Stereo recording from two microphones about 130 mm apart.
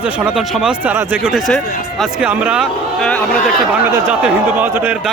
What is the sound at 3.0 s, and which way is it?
Speech, 5° left (ahead or behind).